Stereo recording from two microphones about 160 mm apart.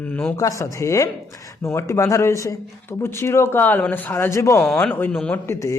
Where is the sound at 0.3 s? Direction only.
20° left (ahead or behind).